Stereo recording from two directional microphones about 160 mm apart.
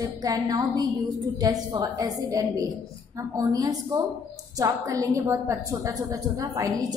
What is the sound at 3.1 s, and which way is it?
A woman's voice, 20° right (ahead or behind).